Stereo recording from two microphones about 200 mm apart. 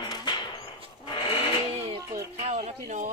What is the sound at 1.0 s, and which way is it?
Sewing machine, 25° left (ahead or behind).